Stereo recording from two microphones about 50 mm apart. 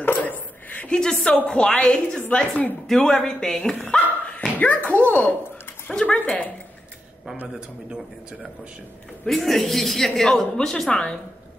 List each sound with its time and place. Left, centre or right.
0.0 s a sound: left
0.9 s speech: centre
2.1 s speech: left
2.9 s speech: centre; by 6.5 s left
7.5 s speech: centre
9.3 s a woman's voice: centre